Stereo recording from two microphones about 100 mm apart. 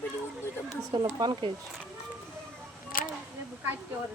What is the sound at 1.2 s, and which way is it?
Speech, 50° right (ahead or behind).